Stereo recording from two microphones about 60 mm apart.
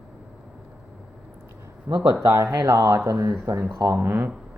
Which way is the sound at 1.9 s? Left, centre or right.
Right.